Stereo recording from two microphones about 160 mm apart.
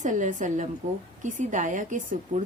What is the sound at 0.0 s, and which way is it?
A woman's voice, 50° right (ahead or behind).